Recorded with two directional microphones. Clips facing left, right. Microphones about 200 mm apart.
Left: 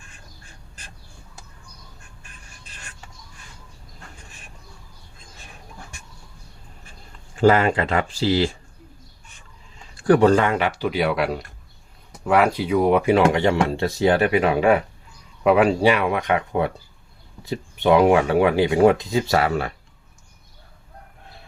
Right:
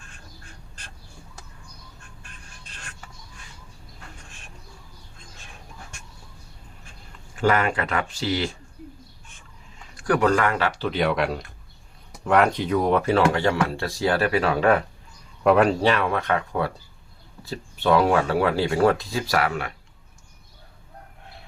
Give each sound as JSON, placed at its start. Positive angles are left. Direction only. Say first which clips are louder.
{"t": 7.3, "sound": "speech", "louder": "left 5 dB", "side_deg": 30}
{"t": 9.9, "sound": "speech", "louder": "left 6 dB", "side_deg": 30}